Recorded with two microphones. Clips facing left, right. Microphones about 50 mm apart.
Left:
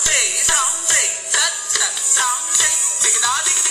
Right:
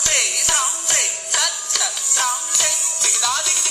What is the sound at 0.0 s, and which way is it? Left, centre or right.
Music, centre.